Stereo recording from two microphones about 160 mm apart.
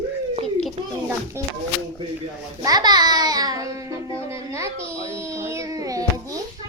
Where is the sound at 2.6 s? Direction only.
25° right (ahead or behind).